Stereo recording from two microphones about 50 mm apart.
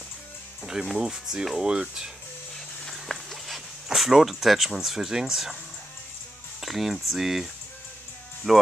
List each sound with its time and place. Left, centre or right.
0.9 s speech: centre
2.5 s dog: centre
6.6 s speech: centre
8.5 s speech: centre